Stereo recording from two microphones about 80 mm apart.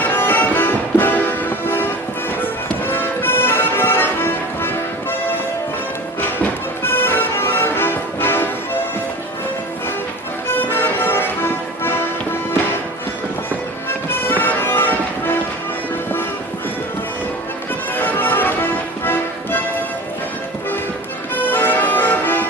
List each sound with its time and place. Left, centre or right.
0.0 s music: left
6.1 s music: left
10.5 s music: left
14.1 s bagpipes: left
17.9 s music: left
21.3 s music: left